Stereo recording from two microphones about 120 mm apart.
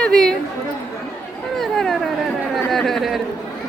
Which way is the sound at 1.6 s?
Centre (ahead or behind).